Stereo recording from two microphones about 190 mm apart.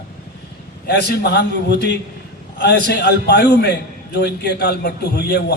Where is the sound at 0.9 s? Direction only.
60° left (ahead or behind).